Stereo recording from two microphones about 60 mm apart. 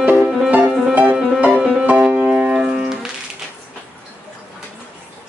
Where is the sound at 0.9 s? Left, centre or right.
Right; by 2.9 s centre.